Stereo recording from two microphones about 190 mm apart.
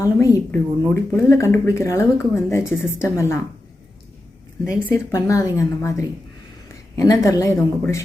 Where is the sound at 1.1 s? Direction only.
15° left (ahead or behind).